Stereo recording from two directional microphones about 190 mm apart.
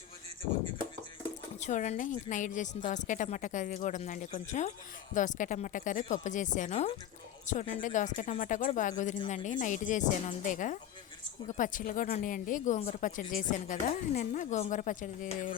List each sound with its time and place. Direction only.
1.6 s a woman's voice: 40° left (ahead or behind)